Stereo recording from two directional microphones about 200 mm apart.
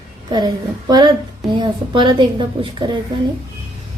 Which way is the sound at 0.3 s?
20° right (ahead or behind).